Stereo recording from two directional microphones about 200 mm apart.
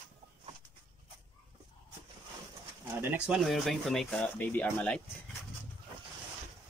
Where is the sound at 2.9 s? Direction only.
5° right (ahead or behind); by 5.5 s 10° left (ahead or behind).